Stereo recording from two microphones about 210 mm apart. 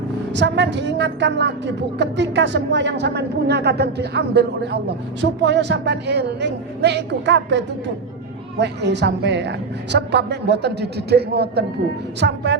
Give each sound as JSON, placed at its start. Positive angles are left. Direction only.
{"t": 0.3, "sound": "a woman's voice", "side_deg": -55}